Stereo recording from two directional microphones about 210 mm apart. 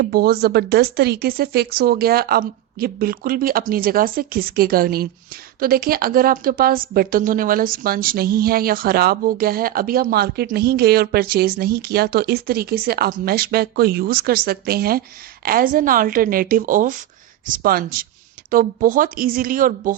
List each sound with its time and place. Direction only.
0.0 s a woman's voice: 45° right (ahead or behind)